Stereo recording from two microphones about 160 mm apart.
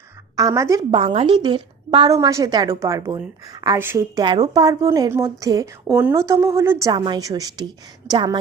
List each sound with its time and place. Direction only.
0.3 s a woman's voice: 20° right (ahead or behind)
0.9 s a woman's voice: 35° right (ahead or behind)
2.1 s a woman's voice: 20° right (ahead or behind)